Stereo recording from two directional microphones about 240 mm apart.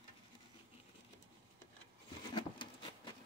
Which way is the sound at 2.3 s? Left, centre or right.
Centre.